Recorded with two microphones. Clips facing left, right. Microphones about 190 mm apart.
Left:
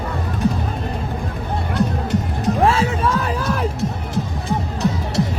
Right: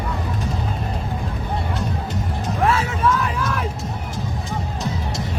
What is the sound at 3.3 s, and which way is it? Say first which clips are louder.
Crowd: left 2 dB; 35° left (ahead or behind).